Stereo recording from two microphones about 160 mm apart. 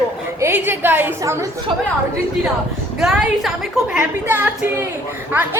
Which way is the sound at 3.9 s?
15° right (ahead or behind).